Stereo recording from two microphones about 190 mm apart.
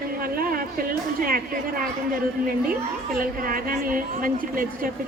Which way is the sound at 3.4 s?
50° right (ahead or behind).